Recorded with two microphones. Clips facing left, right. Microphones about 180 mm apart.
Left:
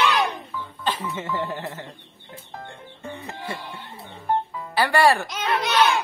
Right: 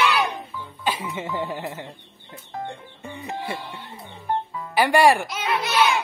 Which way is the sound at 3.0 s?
15° right (ahead or behind).